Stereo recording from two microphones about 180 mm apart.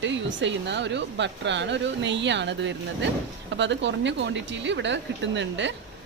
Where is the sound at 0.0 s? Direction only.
85° right.